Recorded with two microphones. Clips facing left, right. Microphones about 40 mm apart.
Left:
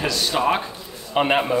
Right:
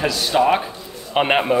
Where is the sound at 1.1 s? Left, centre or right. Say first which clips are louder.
Right 2 dB; right.